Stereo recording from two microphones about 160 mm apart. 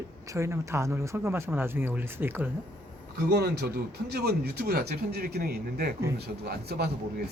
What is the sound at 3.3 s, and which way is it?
Speech, 90° right.